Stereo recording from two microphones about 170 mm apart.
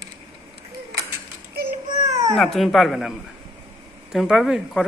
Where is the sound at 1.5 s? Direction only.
65° right (ahead or behind).